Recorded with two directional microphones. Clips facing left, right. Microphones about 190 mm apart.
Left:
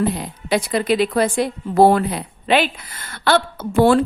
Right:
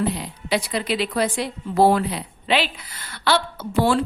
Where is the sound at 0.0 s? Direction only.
50° left (ahead or behind).